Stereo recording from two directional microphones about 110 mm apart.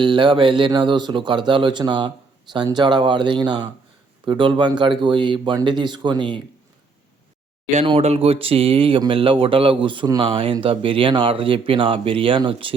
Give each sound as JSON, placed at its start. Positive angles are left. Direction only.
{"t": 0.0, "sound": "speech", "side_deg": -45}
{"t": 7.9, "sound": "speech", "side_deg": -65}